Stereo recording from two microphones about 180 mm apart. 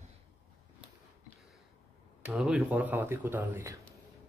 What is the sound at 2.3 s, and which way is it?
A man's voice, 5° right (ahead or behind).